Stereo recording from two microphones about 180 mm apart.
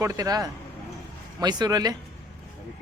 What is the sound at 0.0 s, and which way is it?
Speech, 20° right (ahead or behind).